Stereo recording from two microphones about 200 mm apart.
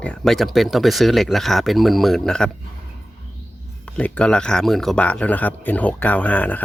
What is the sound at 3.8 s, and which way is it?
Speech, 5° left (ahead or behind).